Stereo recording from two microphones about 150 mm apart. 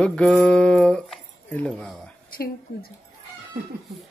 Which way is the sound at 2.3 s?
90° left.